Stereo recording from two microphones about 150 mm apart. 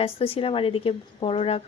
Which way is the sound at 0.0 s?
40° left (ahead or behind).